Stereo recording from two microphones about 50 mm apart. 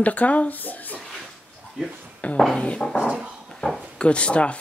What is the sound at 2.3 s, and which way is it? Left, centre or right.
Speech, centre.